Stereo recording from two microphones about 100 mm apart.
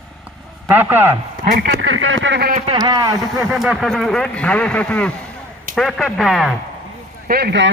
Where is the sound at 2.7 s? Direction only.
45° right (ahead or behind).